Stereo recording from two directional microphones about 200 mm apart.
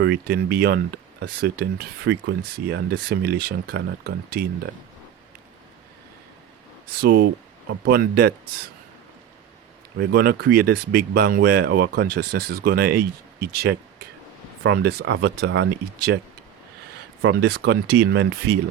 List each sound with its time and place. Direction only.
0.0 s speech: 50° right (ahead or behind)
7.0 s speech: 50° right (ahead or behind)
10.0 s speech: 50° right (ahead or behind); by 16.2 s 65° right (ahead or behind)
17.2 s speech: 55° right (ahead or behind)